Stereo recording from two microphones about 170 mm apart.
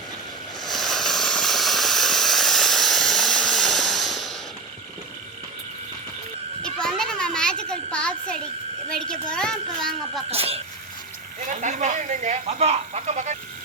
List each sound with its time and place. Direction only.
0.6 s hiss: centre (ahead or behind)
6.6 s a sound: 5° left (ahead or behind)
8.9 s a woman's voice: 5° left (ahead or behind)
10.3 s speech: 35° right (ahead or behind)
11.4 s speech: 45° right (ahead or behind)